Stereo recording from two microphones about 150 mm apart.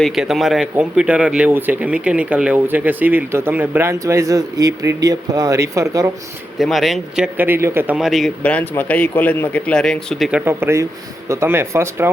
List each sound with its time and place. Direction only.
0.0 s speech: centre (ahead or behind); by 6.1 s 20° right (ahead or behind)
6.6 s speech: centre (ahead or behind)
7.3 s speech: 15° right (ahead or behind)
7.9 s speech: centre (ahead or behind)
10.4 s speech: 15° right (ahead or behind)